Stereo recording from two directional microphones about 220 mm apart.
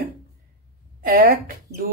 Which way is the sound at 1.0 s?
40° right (ahead or behind).